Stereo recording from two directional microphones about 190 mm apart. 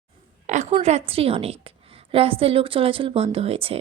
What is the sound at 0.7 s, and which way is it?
A woman's voice, 35° right (ahead or behind).